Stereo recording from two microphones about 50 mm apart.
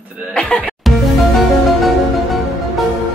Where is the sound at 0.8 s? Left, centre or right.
Centre.